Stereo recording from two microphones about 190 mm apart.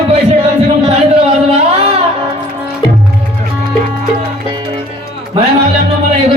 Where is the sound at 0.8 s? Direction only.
30° right (ahead or behind).